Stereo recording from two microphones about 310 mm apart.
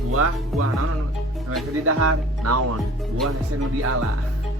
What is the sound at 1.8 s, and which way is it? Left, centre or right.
Speech, right.